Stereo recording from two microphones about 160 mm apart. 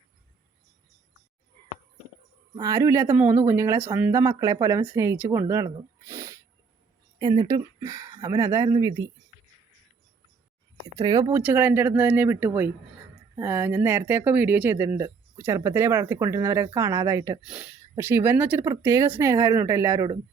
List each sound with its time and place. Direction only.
2.6 s speech: 20° right (ahead or behind)
10.9 s speech: 20° right (ahead or behind)
17.4 s speech: 5° right (ahead or behind)